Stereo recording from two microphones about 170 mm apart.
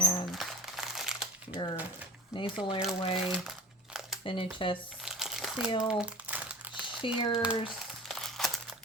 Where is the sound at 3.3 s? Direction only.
Centre (ahead or behind).